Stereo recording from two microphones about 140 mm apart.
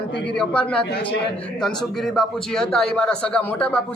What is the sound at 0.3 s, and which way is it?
A man's voice, 5° left (ahead or behind).